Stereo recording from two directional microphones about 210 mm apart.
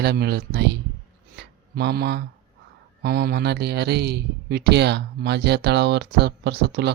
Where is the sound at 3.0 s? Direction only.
50° right (ahead or behind).